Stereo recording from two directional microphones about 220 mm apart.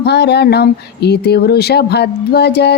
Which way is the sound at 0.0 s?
50° left (ahead or behind).